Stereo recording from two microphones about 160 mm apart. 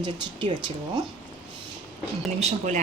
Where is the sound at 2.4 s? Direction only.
45° right (ahead or behind).